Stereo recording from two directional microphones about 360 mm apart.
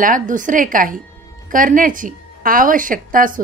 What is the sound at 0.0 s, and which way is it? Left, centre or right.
A woman's voice, right.